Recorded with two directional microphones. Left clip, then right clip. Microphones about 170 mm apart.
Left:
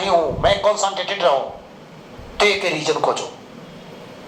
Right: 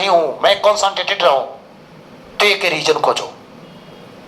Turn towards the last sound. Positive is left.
turn(degrees=-35)  # may be behind; listen again after turning